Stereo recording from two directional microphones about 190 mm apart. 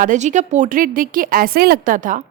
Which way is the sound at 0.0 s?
40° right (ahead or behind).